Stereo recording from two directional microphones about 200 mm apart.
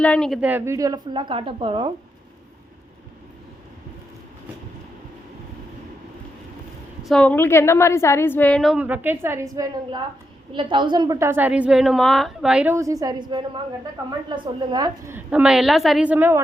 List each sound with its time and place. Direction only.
0.0 s speech: 5° left (ahead or behind); by 1.9 s 25° right (ahead or behind)
7.0 s a woman's voice: 5° left (ahead or behind)